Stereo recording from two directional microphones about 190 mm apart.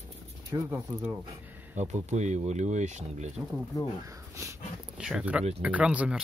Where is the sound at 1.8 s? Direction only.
35° right (ahead or behind).